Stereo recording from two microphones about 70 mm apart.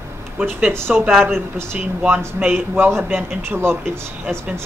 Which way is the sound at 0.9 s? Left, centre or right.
Centre.